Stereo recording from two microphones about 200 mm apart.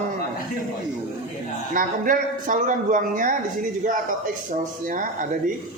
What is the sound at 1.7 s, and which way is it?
A man's voice, 40° right (ahead or behind).